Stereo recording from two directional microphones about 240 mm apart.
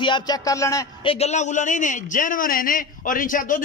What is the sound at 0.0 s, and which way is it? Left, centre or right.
Speech, centre.